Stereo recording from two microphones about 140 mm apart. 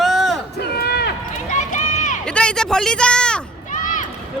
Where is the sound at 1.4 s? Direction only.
60° left (ahead or behind).